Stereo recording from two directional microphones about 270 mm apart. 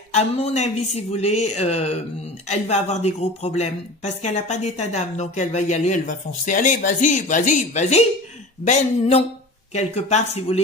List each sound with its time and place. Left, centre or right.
0.1 s speech: left